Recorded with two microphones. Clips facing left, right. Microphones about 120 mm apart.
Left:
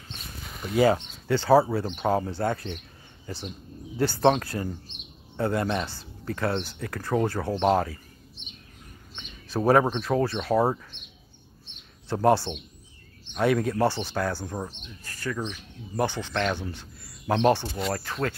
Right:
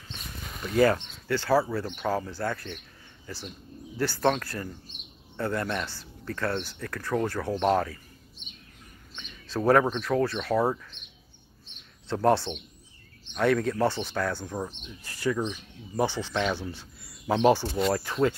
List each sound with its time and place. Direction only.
1.2 s speech: 20° left (ahead or behind)
9.1 s speech: 15° left (ahead or behind)
12.1 s speech: 10° left (ahead or behind)
14.9 s speech: 15° right (ahead or behind); by 18.0 s centre (ahead or behind)
18.0 s speech: 10° right (ahead or behind)